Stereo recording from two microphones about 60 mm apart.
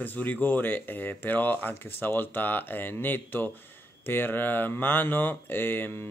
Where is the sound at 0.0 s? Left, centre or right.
Left.